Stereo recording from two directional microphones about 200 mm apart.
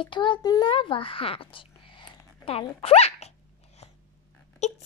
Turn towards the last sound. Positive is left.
turn(degrees=35)  # may be behind; listen again after turning